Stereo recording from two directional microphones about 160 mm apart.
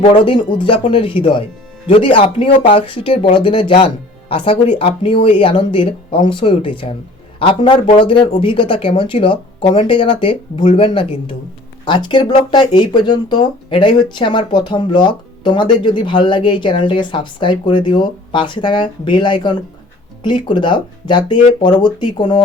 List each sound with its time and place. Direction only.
0.0 s a man's voice: 30° left (ahead or behind)